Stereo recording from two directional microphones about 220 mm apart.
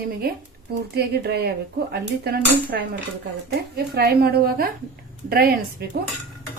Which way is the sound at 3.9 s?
45° right (ahead or behind).